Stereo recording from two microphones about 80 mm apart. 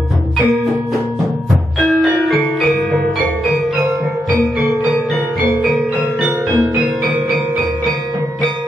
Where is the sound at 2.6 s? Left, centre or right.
Centre.